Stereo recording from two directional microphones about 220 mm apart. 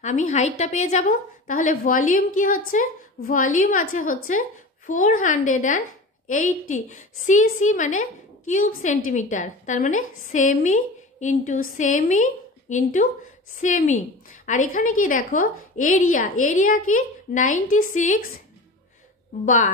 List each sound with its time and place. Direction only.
0.0 s a woman's voice: 35° left (ahead or behind)
19.4 s a woman's voice: 35° left (ahead or behind)